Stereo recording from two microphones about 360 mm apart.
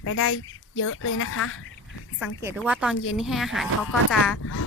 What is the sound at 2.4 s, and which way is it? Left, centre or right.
Speech, centre.